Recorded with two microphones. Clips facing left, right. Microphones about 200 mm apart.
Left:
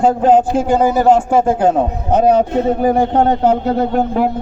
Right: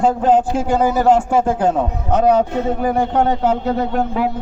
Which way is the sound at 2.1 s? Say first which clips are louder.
Left 2 dB; 35° left (ahead or behind).